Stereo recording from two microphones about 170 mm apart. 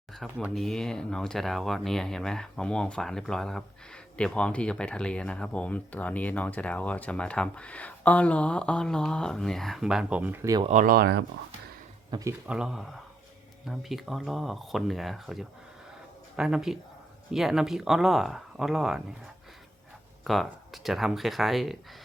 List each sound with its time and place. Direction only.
0.1 s speech: centre (ahead or behind)
10.6 s speech: 45° right (ahead or behind); by 11.2 s 65° right (ahead or behind)
12.1 s speech: 25° right (ahead or behind)
12.5 s speech: 5° right (ahead or behind)